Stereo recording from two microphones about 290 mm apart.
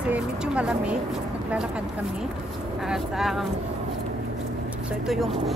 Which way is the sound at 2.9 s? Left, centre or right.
Centre.